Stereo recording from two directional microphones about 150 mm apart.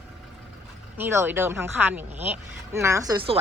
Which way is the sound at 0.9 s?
15° right (ahead or behind).